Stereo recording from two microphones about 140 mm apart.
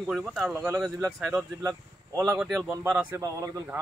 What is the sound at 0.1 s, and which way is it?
Speech, centre (ahead or behind).